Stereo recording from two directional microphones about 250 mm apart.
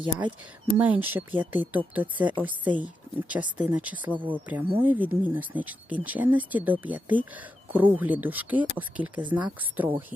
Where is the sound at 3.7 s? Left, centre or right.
Centre.